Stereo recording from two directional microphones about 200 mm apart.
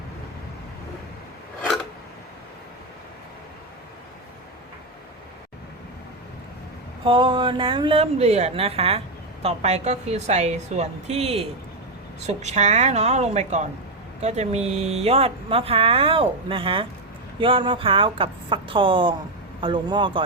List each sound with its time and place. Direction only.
7.0 s a woman's voice: 25° right (ahead or behind)